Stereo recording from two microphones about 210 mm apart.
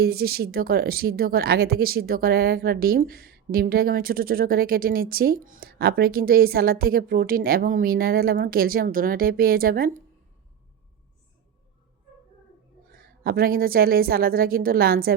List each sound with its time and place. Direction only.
0.0 s speech: 45° right (ahead or behind)
13.0 s speech: 45° right (ahead or behind)